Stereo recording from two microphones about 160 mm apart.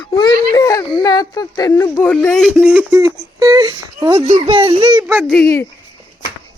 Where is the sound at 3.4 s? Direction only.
25° right (ahead or behind).